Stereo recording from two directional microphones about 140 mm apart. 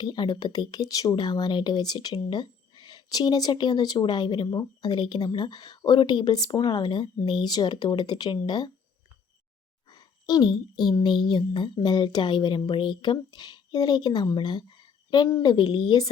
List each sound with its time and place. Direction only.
0.0 s speech: 30° left (ahead or behind)
9.9 s speech: 30° left (ahead or behind)